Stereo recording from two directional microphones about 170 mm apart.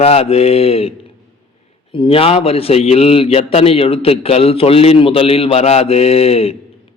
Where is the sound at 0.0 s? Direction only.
35° left (ahead or behind).